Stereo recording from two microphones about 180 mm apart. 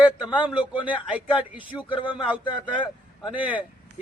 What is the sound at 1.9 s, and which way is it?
Speech, 25° left (ahead or behind).